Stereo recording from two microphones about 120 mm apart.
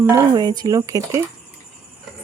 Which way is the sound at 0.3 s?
35° right (ahead or behind).